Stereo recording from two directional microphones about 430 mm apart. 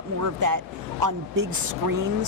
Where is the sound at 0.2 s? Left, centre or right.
Right.